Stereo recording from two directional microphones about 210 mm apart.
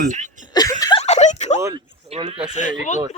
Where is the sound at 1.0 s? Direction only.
35° left (ahead or behind).